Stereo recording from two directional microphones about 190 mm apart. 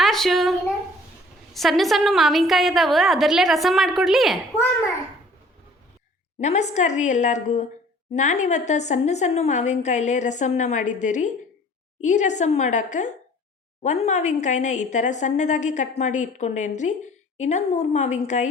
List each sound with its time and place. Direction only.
0.0 s speech: centre (ahead or behind)
1.5 s a woman's voice: centre (ahead or behind)
6.4 s a woman's voice: 35° left (ahead or behind)